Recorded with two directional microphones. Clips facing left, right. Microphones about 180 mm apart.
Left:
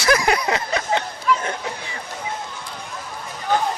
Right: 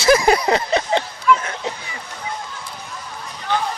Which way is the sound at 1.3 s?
40° left (ahead or behind).